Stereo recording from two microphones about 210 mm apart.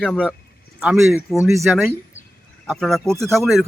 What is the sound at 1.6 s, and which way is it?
A man's voice, centre (ahead or behind).